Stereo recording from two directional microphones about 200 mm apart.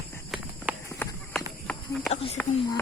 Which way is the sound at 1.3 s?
Centre (ahead or behind).